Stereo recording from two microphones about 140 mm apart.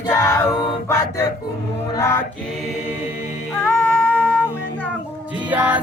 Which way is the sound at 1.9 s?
20° left (ahead or behind).